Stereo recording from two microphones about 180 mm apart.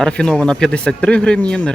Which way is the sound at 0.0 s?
5° left (ahead or behind).